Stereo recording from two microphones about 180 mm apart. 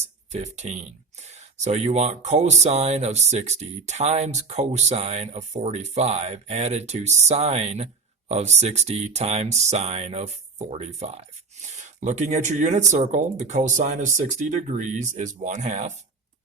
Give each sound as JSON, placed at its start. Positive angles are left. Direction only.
{"t": 0.0, "sound": "speech", "side_deg": -40}